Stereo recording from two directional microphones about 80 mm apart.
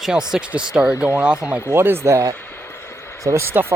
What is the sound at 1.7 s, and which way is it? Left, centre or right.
Speech, right.